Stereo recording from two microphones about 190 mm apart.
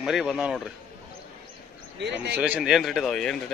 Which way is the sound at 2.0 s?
65° right (ahead or behind).